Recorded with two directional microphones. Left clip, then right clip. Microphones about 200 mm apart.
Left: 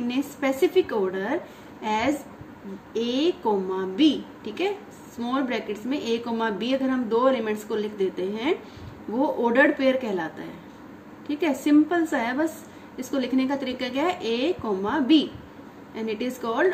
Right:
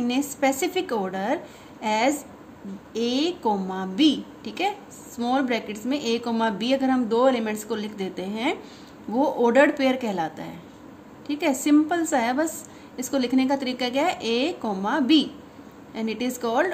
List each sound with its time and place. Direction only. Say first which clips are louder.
0.1 s a woman's voice: right 2 dB; 55° right (ahead or behind)